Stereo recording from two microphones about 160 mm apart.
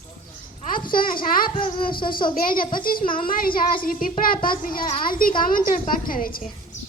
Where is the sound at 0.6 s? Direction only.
60° left (ahead or behind).